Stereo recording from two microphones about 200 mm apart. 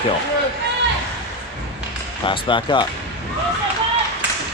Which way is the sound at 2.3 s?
25° left (ahead or behind).